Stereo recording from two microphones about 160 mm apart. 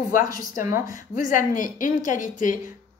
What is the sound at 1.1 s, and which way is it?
Speech, 55° left (ahead or behind).